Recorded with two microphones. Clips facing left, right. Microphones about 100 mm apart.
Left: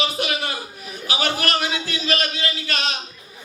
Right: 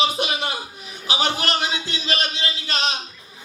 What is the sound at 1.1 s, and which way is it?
A man's voice, 20° right (ahead or behind).